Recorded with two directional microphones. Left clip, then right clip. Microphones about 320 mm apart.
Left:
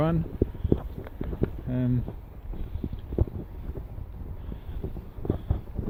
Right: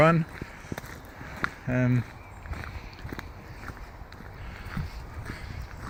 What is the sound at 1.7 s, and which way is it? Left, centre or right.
Speech, centre.